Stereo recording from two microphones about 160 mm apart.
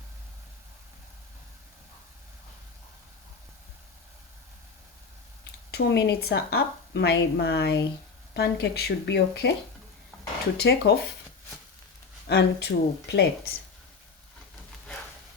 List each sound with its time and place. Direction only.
5.7 s speech: 90° left
10.6 s speech: 90° left
12.3 s speech: 90° left